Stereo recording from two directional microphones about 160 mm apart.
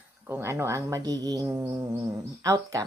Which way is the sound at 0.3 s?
15° right (ahead or behind).